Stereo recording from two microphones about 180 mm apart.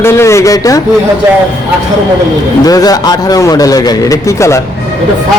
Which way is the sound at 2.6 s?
20° left (ahead or behind).